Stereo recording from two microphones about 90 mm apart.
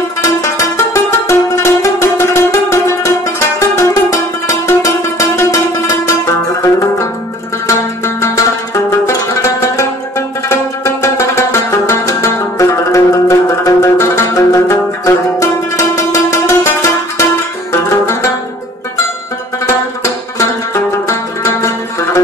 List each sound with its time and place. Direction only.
0.2 s music: 35° left (ahead or behind)
6.6 s music: 35° left (ahead or behind)
17.8 s music: 30° left (ahead or behind)
19.6 s music: 30° left (ahead or behind)